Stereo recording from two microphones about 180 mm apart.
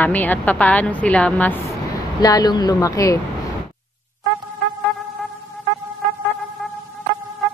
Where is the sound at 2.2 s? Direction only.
20° left (ahead or behind).